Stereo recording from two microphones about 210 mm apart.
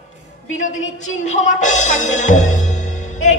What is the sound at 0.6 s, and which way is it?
Speech, 35° left (ahead or behind).